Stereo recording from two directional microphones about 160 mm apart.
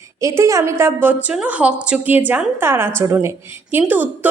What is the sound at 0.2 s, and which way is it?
A woman's voice, 20° right (ahead or behind).